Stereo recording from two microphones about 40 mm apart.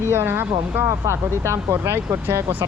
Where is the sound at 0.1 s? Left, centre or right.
Right.